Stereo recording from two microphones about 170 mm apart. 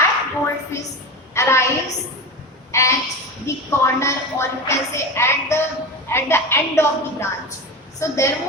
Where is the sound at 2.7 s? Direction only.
15° left (ahead or behind).